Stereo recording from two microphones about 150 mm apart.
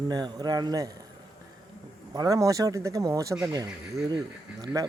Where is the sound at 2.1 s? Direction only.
25° right (ahead or behind).